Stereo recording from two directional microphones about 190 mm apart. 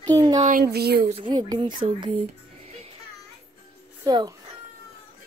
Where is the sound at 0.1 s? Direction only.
20° right (ahead or behind).